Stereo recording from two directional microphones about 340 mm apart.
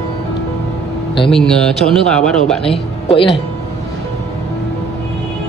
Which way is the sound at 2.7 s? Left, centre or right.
Centre.